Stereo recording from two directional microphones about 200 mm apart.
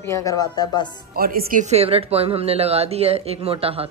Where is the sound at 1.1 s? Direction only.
50° right (ahead or behind).